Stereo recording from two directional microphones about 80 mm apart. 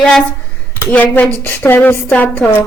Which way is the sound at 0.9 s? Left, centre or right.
Centre.